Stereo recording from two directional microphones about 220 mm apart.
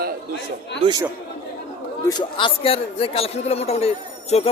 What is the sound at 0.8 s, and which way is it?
Speech, 20° right (ahead or behind).